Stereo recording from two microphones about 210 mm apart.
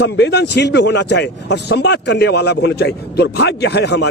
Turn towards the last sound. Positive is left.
turn(degrees=55)  # may be behind; listen again after turning